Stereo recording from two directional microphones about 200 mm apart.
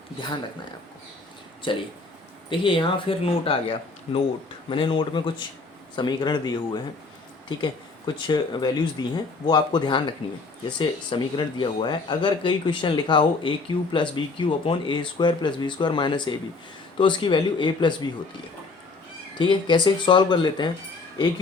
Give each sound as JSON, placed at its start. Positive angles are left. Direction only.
{"t": 1.6, "sound": "speech", "side_deg": 25}
{"t": 19.4, "sound": "speech", "side_deg": 25}